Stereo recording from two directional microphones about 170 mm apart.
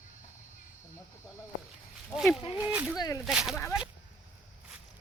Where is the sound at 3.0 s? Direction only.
20° left (ahead or behind).